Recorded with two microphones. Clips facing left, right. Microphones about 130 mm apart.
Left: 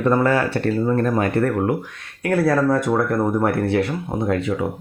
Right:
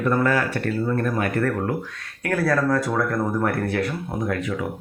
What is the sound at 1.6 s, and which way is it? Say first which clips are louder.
Speech: left 4 dB; 20° left (ahead or behind).